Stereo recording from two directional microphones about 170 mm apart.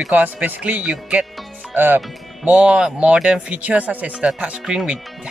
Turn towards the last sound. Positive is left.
turn(degrees=-5)  # may be behind; listen again after turning